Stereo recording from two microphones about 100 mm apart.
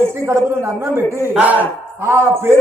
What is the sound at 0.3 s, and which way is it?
Speech, 25° right (ahead or behind).